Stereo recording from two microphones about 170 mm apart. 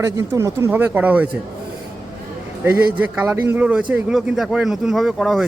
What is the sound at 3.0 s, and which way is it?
A man's voice, 10° right (ahead or behind).